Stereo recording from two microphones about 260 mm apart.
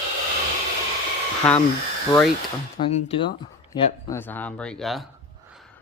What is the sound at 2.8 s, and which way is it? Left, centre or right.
Speech, left.